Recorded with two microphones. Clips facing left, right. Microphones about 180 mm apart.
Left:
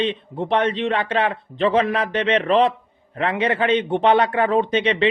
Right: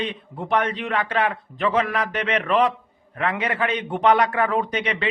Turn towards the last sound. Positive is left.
turn(degrees=25)  # may be behind; listen again after turning